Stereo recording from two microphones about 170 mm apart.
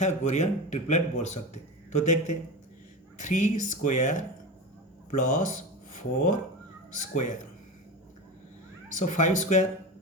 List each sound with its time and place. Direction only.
0.0 s a man's voice: 45° left (ahead or behind)
6.9 s a man's voice: 45° left (ahead or behind)
8.9 s a man's voice: 45° left (ahead or behind)